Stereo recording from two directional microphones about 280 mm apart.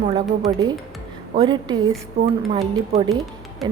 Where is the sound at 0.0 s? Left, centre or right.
Centre.